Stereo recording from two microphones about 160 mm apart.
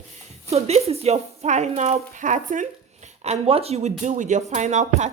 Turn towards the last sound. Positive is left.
turn(degrees=-45)  # may be behind; listen again after turning